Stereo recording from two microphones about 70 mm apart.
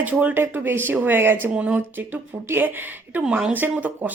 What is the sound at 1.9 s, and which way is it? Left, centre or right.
Speech, right.